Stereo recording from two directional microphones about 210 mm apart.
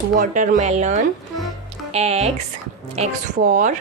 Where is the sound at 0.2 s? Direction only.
35° right (ahead or behind).